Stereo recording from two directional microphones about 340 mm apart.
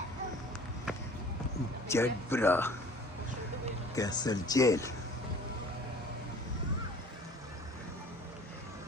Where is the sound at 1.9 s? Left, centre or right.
Centre.